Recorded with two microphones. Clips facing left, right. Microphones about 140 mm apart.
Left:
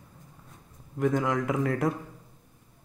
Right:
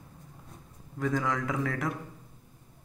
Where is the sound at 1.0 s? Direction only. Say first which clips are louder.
Left 4 dB; 20° left (ahead or behind).